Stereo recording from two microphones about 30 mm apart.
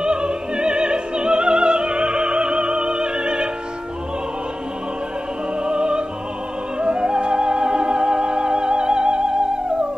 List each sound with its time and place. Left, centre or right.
0.0 s opera: right
5.6 s music: right